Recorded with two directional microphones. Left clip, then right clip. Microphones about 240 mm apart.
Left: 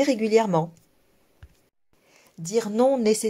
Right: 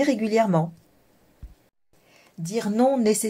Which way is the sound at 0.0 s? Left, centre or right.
Left.